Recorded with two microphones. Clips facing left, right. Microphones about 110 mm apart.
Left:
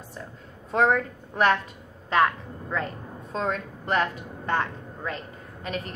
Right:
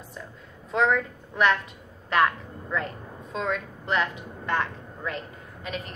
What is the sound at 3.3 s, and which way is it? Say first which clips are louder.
A woman's voice: left 1 dB; 40° left (ahead or behind).